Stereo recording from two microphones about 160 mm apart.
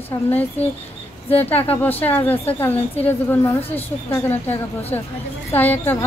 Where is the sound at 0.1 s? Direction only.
25° left (ahead or behind).